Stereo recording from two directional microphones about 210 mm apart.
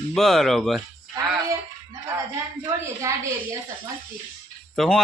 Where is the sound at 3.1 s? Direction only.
15° right (ahead or behind).